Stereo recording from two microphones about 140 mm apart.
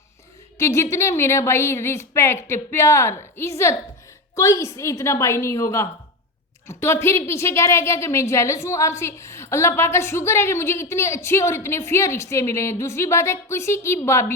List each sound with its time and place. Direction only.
0.6 s a woman's voice: 20° left (ahead or behind)